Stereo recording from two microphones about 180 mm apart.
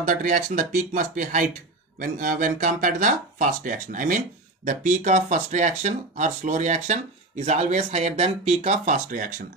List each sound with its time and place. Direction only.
0.0 s speech: 45° right (ahead or behind)